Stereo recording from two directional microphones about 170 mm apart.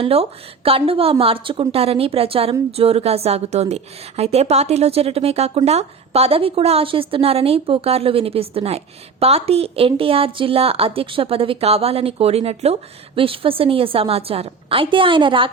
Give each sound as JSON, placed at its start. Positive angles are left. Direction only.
{"t": 0.0, "sound": "a woman's voice", "side_deg": -35}